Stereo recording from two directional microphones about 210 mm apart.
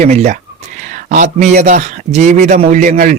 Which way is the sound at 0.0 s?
30° right (ahead or behind).